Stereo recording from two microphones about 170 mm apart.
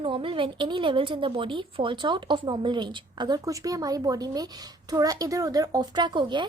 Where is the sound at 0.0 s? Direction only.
30° right (ahead or behind).